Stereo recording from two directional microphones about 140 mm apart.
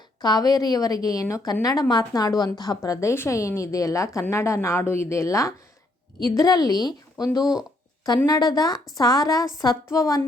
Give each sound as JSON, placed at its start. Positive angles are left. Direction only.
{"t": 0.2, "sound": "a woman's voice", "side_deg": 30}